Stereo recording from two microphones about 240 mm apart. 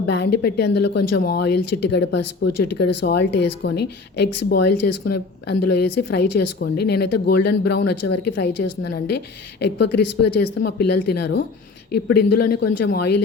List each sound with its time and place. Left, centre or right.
0.1 s a woman's voice: left
7.1 s speech: left
7.4 s a woman's voice: left